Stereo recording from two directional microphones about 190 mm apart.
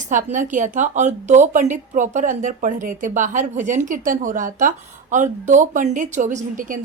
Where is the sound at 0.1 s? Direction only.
40° right (ahead or behind).